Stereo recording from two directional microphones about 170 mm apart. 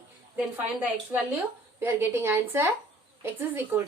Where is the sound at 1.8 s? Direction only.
15° right (ahead or behind).